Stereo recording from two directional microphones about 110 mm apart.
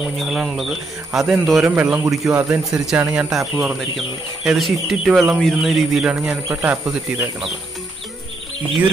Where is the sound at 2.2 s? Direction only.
5° right (ahead or behind).